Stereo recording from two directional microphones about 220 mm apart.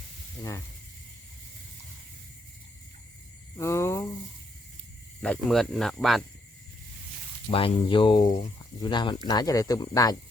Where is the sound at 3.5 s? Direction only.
10° left (ahead or behind).